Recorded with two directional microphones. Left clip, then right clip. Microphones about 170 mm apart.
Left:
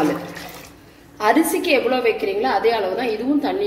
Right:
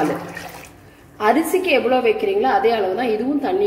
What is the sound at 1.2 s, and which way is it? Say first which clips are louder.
A woman's voice: even; 35° right (ahead or behind).